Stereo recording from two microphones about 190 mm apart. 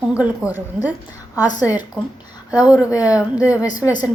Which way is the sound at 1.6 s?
10° right (ahead or behind).